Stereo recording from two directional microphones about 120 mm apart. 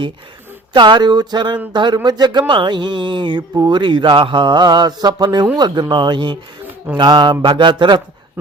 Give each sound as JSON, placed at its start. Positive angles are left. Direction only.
{"t": 0.7, "sound": "speech", "side_deg": -40}